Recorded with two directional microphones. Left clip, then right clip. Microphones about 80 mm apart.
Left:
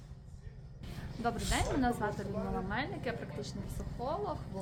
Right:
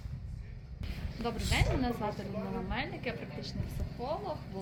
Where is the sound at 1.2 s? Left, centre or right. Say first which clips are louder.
Even; left.